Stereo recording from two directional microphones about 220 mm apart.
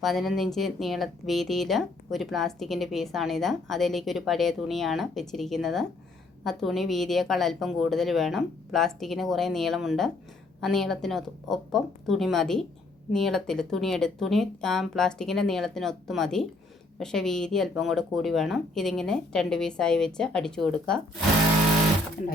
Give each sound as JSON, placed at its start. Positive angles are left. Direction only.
{"t": 0.0, "sound": "speech", "side_deg": 0}